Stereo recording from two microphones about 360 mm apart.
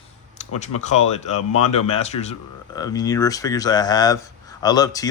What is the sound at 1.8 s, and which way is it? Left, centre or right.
Speech, centre.